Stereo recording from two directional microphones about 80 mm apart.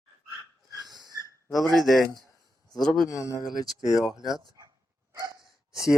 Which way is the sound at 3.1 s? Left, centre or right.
Left.